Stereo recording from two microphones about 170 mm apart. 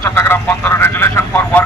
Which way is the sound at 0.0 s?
15° left (ahead or behind).